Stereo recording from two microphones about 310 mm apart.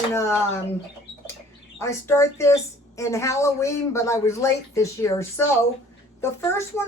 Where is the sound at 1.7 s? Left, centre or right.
Centre.